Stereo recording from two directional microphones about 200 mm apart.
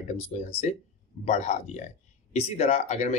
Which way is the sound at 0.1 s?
35° left (ahead or behind).